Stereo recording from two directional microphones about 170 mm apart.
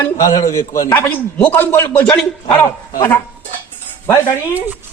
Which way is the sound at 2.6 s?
20° left (ahead or behind).